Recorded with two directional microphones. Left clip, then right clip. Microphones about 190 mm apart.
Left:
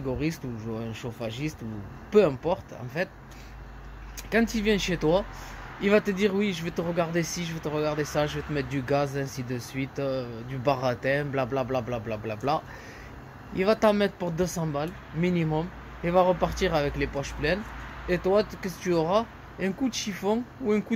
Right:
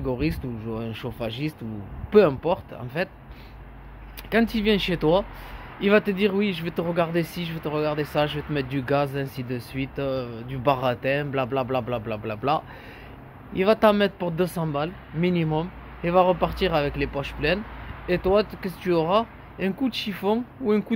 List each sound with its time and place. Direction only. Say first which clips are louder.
0.0 s speech: right 3 dB; 15° right (ahead or behind)
4.3 s speech: right 3 dB; 10° right (ahead or behind)